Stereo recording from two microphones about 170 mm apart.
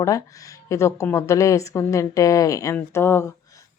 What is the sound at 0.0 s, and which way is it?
Speech, 20° left (ahead or behind).